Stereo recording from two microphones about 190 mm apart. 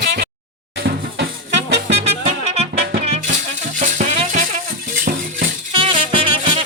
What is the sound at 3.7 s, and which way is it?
Music, 40° right (ahead or behind).